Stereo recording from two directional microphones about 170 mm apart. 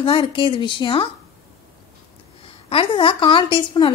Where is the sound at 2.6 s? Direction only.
30° left (ahead or behind).